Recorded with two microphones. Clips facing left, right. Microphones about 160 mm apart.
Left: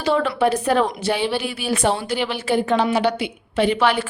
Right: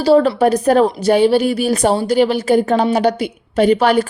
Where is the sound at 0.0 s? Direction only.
35° right (ahead or behind).